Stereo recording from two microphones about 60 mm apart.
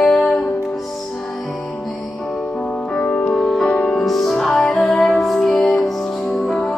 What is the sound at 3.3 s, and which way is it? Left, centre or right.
Music, centre.